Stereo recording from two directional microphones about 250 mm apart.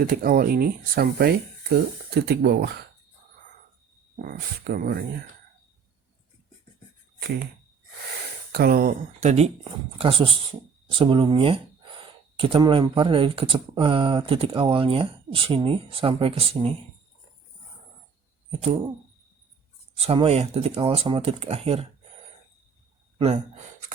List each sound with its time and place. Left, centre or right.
0.0 s speech: right
4.2 s speech: right
8.5 s speech: right
20.0 s speech: right
23.1 s speech: right